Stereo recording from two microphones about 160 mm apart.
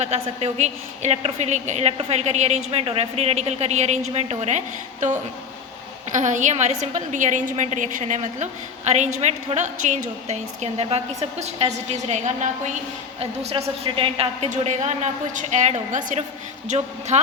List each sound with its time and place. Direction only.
0.0 s a woman's voice: 40° right (ahead or behind)